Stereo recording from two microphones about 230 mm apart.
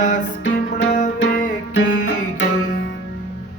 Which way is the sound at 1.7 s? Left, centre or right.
Left.